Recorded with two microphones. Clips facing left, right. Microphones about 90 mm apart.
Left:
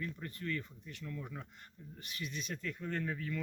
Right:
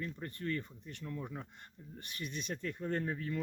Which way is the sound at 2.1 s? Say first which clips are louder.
Right 1 dB; 45° right (ahead or behind).